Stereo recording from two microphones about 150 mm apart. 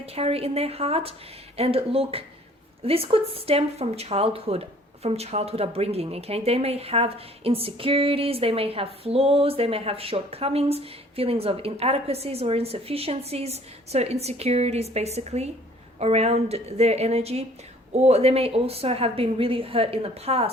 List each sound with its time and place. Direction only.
0.0 s a woman's voice: 40° right (ahead or behind)